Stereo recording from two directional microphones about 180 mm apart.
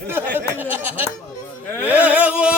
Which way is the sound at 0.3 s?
10° right (ahead or behind).